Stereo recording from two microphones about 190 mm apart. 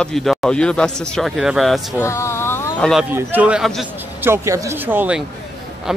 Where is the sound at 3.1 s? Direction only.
10° right (ahead or behind).